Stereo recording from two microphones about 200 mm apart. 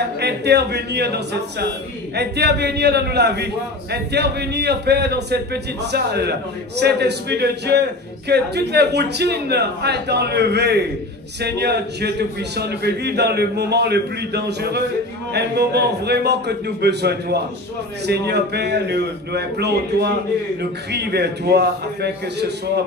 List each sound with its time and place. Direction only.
0.2 s a man's voice: 55° right (ahead or behind)